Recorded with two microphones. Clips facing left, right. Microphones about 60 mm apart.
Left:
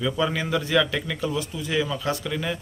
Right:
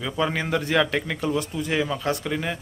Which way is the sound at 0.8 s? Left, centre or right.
Right.